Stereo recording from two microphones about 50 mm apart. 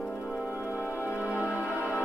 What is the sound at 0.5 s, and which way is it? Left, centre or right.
Music, left.